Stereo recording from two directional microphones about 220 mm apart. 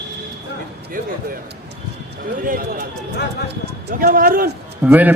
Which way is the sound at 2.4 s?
40° right (ahead or behind).